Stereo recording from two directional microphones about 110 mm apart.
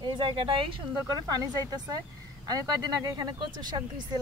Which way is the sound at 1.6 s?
35° right (ahead or behind).